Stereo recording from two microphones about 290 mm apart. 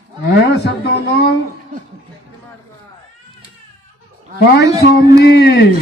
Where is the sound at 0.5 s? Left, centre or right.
Left.